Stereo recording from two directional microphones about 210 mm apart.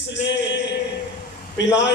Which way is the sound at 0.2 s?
60° left (ahead or behind).